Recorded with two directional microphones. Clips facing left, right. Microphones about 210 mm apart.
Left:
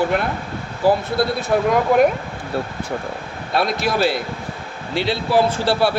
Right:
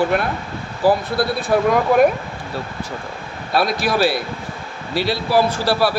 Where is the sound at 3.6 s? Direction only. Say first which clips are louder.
Right 1 dB; 20° left (ahead or behind).